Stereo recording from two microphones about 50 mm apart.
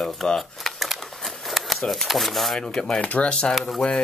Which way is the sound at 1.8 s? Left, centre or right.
Centre.